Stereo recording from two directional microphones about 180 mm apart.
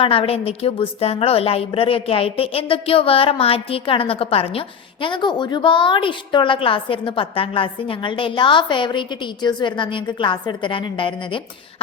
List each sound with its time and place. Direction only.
0.0 s a woman's voice: 30° left (ahead or behind)